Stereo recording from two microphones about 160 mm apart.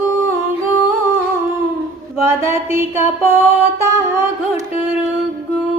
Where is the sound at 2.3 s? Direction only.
15° right (ahead or behind).